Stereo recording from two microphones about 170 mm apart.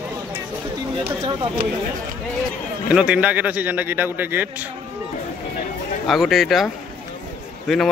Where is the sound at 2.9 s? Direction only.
5° right (ahead or behind).